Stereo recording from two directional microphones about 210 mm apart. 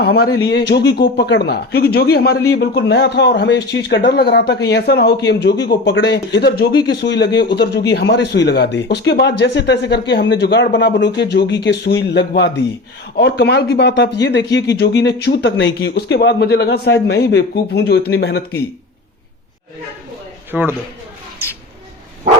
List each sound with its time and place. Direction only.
0.0 s a man's voice: 50° left (ahead or behind)
20.5 s a man's voice: 10° right (ahead or behind)